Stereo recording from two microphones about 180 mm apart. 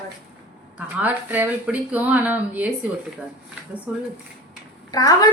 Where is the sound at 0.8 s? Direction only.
10° right (ahead or behind).